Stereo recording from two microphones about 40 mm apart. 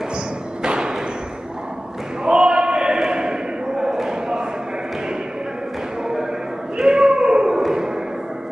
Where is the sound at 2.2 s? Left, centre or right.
Right.